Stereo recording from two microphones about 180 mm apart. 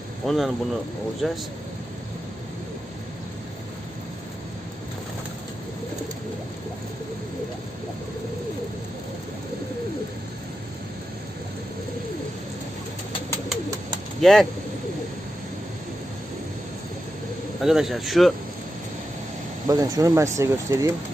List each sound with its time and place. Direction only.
0.3 s speech: centre (ahead or behind)
14.2 s speech: centre (ahead or behind)
17.6 s speech: centre (ahead or behind)
19.6 s speech: 20° right (ahead or behind)